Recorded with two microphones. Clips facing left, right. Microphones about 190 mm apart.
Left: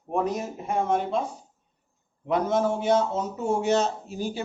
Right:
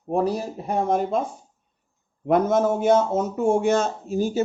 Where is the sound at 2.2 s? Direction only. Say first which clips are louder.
Right 4 dB; 50° right (ahead or behind).